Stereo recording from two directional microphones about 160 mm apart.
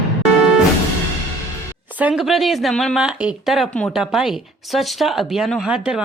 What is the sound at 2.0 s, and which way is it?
A woman's voice, 5° right (ahead or behind).